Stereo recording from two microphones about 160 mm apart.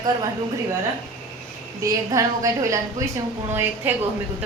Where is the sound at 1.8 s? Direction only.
20° right (ahead or behind).